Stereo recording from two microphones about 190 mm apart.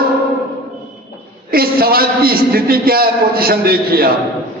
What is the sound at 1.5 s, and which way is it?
A man's voice, 50° right (ahead or behind).